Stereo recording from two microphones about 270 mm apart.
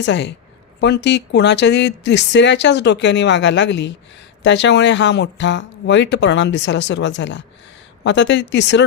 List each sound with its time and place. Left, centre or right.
0.0 s a woman's voice: left